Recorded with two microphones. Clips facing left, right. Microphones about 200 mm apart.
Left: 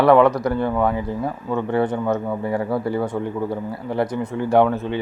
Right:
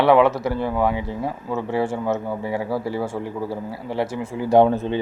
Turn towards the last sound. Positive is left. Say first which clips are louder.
# right 1 dB
turn(degrees=-20)  # may be behind; listen again after turning